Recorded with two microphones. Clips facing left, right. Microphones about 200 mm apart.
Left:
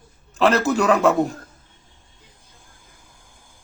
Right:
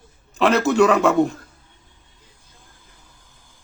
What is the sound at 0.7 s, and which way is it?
Speech, centre (ahead or behind).